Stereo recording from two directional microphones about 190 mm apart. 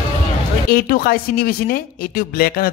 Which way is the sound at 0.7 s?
50° left (ahead or behind).